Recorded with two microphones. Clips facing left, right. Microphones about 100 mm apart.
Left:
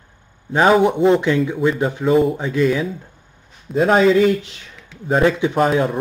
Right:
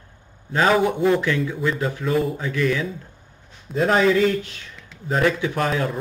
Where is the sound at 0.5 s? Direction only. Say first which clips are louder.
Left 5 dB; 20° left (ahead or behind).